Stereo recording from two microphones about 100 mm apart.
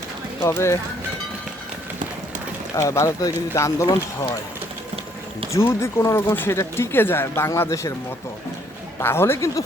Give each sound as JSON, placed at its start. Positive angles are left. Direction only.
{"t": 0.3, "sound": "speech", "side_deg": 25}
{"t": 2.7, "sound": "speech", "side_deg": 30}
{"t": 5.5, "sound": "speech", "side_deg": 25}
{"t": 9.0, "sound": "speech", "side_deg": 25}